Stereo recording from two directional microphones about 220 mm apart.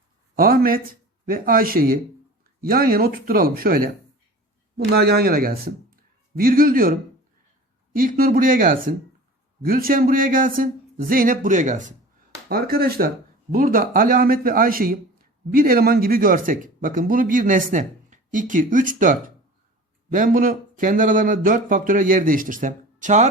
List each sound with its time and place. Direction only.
0.3 s a man's voice: 40° right (ahead or behind)
7.9 s a man's voice: 40° right (ahead or behind)